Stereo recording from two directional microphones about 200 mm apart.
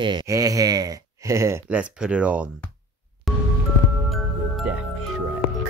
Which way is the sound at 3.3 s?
Centre (ahead or behind).